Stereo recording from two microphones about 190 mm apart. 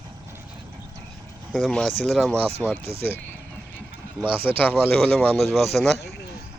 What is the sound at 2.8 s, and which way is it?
Speech, 30° right (ahead or behind).